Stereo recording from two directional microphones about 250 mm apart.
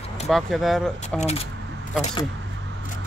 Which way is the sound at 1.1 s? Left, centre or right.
Left.